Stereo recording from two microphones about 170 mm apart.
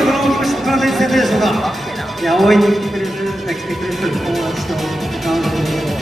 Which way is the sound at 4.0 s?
Centre (ahead or behind).